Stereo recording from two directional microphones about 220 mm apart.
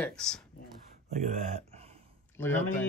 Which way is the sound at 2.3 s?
10° left (ahead or behind).